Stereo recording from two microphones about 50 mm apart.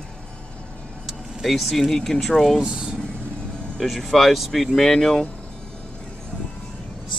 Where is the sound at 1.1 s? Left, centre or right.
Centre.